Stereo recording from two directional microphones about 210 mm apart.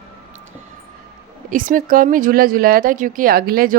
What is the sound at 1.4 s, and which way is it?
Speech, 40° right (ahead or behind).